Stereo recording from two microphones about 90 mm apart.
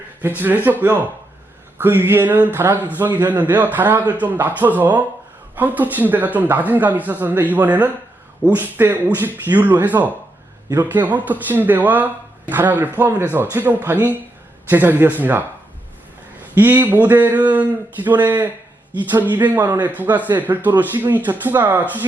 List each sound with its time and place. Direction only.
0.2 s speech: 20° right (ahead or behind)
16.6 s speech: 20° right (ahead or behind)